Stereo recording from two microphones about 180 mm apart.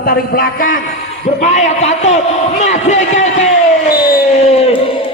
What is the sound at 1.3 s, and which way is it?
A man's voice, 40° left (ahead or behind).